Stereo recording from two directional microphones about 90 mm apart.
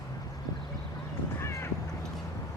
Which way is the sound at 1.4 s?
30° left (ahead or behind).